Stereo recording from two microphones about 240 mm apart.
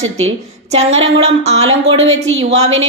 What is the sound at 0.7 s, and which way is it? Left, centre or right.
A woman's voice, right.